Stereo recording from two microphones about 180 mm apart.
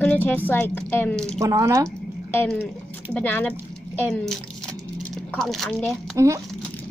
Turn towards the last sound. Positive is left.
turn(degrees=-20)  # may be behind; listen again after turning